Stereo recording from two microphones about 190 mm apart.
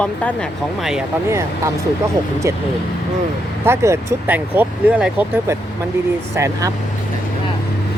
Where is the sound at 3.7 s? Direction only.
15° right (ahead or behind).